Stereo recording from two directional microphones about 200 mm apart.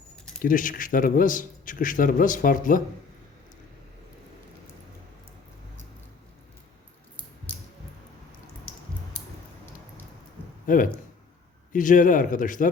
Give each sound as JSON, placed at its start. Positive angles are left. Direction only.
{"t": 0.4, "sound": "a man's voice", "side_deg": 40}
{"t": 10.7, "sound": "a man's voice", "side_deg": 40}